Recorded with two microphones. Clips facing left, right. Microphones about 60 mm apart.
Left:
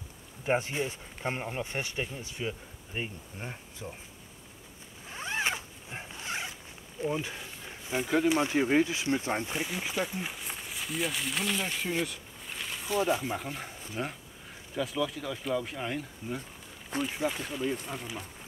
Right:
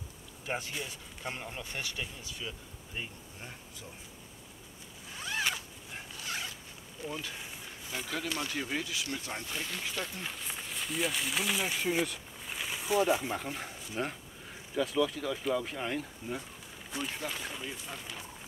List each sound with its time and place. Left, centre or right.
0.5 s speech: left
5.1 s zipper: left
7.0 s speech: left; by 16.3 s centre
16.9 s speech: left
17.4 s speech: centre
17.8 s speech: centre